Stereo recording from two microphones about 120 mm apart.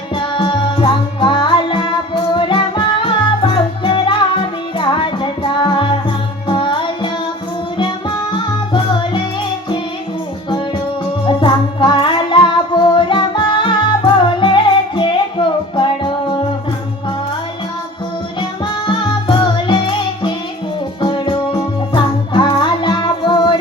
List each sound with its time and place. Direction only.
0.1 s music: 40° left (ahead or behind)
11.3 s music: 40° left (ahead or behind)
18.3 s music: 45° left (ahead or behind)